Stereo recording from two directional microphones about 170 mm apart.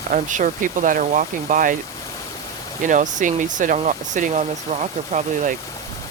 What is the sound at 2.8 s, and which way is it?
Speech, 50° right (ahead or behind).